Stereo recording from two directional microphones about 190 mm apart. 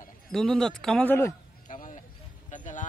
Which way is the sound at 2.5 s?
40° left (ahead or behind).